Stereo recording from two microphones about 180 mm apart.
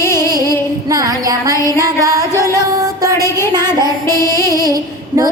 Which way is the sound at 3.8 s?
20° right (ahead or behind).